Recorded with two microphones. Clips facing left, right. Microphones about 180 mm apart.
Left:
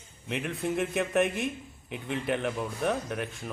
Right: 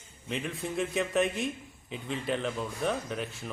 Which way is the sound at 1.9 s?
65° left (ahead or behind).